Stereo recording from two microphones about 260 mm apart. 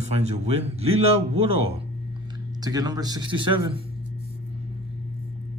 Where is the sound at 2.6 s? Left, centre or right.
Centre.